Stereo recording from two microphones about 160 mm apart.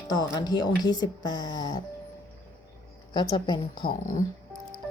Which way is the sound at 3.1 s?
30° left (ahead or behind).